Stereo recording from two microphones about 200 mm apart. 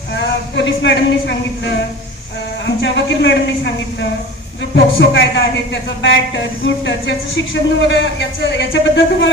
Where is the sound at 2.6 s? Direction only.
65° left (ahead or behind).